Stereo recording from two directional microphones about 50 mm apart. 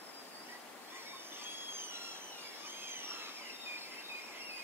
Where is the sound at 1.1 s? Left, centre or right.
Right.